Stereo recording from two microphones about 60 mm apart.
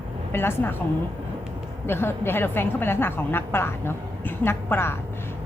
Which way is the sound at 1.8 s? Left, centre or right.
Left.